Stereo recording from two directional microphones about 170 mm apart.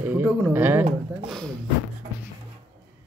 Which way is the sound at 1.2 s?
Centre (ahead or behind).